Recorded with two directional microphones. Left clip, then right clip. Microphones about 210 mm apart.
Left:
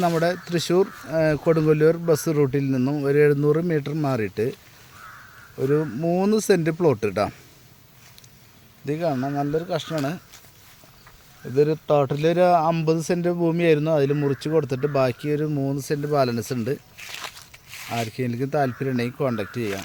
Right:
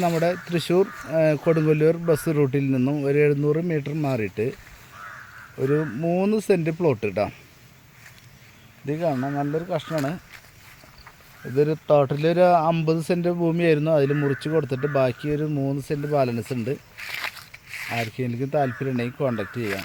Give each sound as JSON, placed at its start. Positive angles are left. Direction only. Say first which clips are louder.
{"t": 0.0, "sound": "speech", "louder": "left 1 dB", "side_deg": 10}
{"t": 5.5, "sound": "speech", "louder": "left 1 dB", "side_deg": 5}
{"t": 8.9, "sound": "speech", "louder": "even", "side_deg": 5}
{"t": 11.5, "sound": "speech", "louder": "even", "side_deg": 0}
{"t": 17.0, "sound": "a sound", "louder": "right 4 dB", "side_deg": -15}
{"t": 17.5, "sound": "zipper", "louder": "right 1 dB", "side_deg": 0}
{"t": 18.1, "sound": "speech", "louder": "even", "side_deg": 10}